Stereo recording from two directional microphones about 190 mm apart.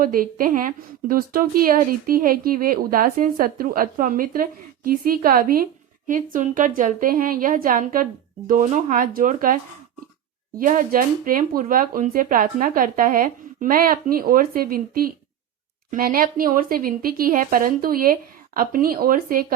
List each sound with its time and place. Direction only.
0.0 s speech: 50° right (ahead or behind)
10.6 s speech: 45° right (ahead or behind)